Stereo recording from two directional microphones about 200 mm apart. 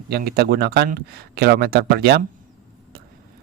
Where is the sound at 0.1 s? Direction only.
50° right (ahead or behind).